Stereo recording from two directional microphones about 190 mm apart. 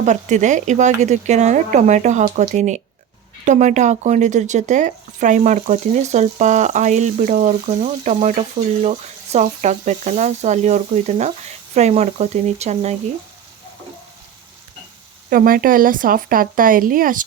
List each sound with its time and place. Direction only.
0.0 s speech: 40° right (ahead or behind)
15.3 s a woman's voice: 50° right (ahead or behind)